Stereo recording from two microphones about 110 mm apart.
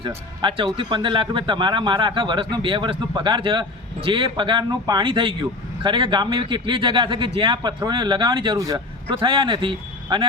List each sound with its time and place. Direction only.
0.4 s a man's voice: 50° right (ahead or behind)
8.5 s speech: 30° right (ahead or behind)
9.0 s a man's voice: 45° right (ahead or behind)